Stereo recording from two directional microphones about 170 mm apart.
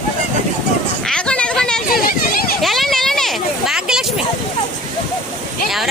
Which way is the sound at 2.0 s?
60° left (ahead or behind).